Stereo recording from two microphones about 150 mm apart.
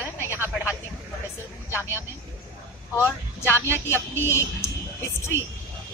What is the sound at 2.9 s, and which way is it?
Speech, 15° left (ahead or behind).